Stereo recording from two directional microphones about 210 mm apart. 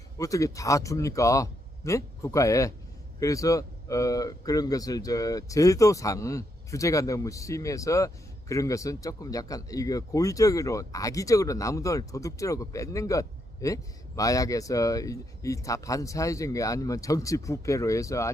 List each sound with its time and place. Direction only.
0.2 s speech: 15° left (ahead or behind)